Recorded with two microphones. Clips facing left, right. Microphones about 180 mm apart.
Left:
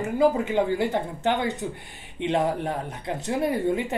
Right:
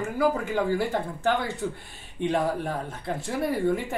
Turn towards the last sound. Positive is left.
turn(degrees=20)  # may be behind; listen again after turning